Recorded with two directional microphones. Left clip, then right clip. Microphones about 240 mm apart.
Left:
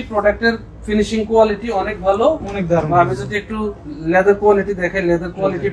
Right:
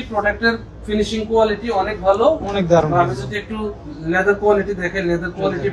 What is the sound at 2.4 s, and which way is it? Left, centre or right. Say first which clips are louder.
Speech: right 3 dB; centre.